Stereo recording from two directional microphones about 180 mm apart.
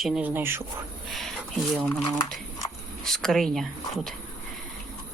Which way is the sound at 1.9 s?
20° left (ahead or behind).